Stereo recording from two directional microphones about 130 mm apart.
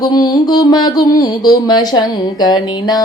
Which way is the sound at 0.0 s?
30° left (ahead or behind).